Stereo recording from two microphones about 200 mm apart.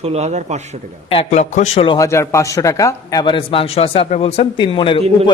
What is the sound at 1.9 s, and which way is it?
A man's voice, 15° left (ahead or behind).